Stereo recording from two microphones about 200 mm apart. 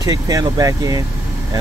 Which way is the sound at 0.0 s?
20° right (ahead or behind).